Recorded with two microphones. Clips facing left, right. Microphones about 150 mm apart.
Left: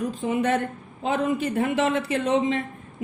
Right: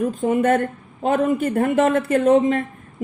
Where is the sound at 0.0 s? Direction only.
50° right (ahead or behind).